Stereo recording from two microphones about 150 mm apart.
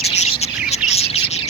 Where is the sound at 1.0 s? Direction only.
45° left (ahead or behind).